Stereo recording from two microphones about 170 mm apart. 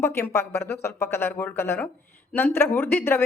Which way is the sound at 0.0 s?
15° left (ahead or behind).